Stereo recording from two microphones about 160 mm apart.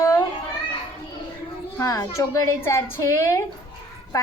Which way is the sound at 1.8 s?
20° left (ahead or behind).